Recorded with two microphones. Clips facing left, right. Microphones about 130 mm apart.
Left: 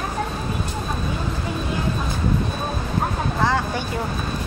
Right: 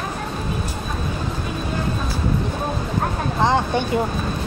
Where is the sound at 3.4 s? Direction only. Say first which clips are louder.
Right 4 dB; 20° right (ahead or behind).